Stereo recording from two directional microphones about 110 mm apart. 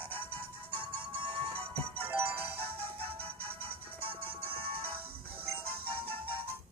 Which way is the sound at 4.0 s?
60° right (ahead or behind).